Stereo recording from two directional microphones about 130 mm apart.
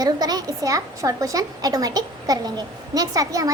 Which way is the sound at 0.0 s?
30° right (ahead or behind).